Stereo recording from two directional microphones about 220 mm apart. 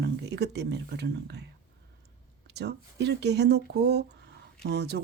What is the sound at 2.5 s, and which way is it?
Speech, 50° right (ahead or behind).